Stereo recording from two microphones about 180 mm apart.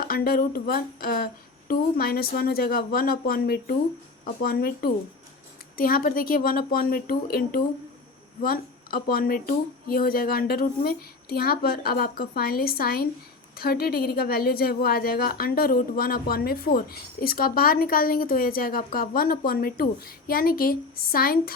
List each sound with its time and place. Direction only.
0.1 s a woman's voice: 55° left (ahead or behind)